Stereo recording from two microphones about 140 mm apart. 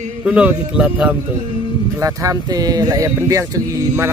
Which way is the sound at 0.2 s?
10° right (ahead or behind).